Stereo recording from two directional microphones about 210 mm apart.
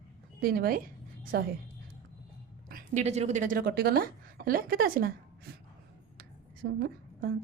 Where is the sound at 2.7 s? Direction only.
40° right (ahead or behind).